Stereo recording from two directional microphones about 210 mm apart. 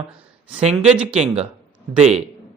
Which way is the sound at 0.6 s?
30° right (ahead or behind).